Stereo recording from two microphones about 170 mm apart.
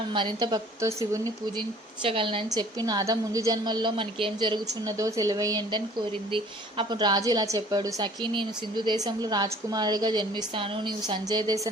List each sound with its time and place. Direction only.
0.1 s speech: 30° right (ahead or behind)